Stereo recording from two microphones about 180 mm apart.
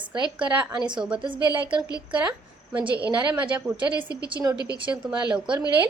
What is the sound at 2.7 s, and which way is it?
A woman's voice, 10° right (ahead or behind).